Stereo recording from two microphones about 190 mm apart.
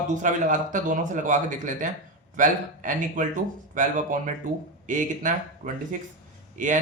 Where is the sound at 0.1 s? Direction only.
40° right (ahead or behind).